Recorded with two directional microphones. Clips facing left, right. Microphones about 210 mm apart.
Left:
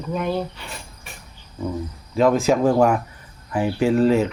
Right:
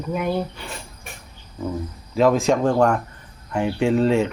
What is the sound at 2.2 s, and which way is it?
Speech, centre (ahead or behind).